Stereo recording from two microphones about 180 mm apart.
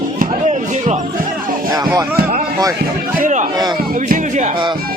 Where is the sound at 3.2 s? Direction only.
45° right (ahead or behind).